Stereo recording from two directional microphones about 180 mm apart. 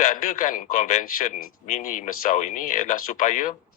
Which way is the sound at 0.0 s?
45° left (ahead or behind).